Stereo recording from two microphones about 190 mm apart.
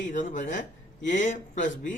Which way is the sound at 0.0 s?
40° left (ahead or behind).